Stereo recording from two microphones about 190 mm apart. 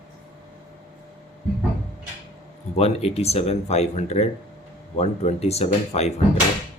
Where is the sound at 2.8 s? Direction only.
35° left (ahead or behind).